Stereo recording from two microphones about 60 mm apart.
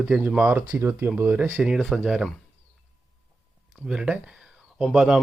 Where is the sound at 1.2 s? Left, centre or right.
Right.